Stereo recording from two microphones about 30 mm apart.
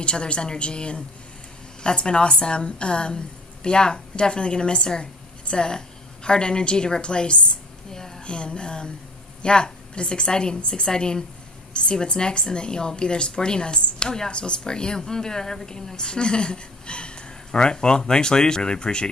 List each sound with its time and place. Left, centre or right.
0.0 s a woman's voice: left